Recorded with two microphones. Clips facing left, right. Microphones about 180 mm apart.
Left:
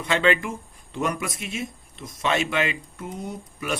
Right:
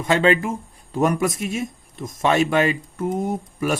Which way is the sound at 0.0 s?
40° right (ahead or behind).